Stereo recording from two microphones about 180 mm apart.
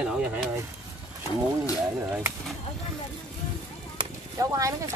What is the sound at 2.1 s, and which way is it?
Speech, 15° right (ahead or behind).